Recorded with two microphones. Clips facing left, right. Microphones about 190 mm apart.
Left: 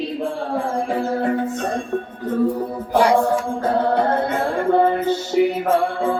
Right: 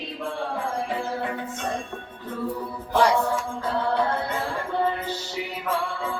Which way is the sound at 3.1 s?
50° left (ahead or behind).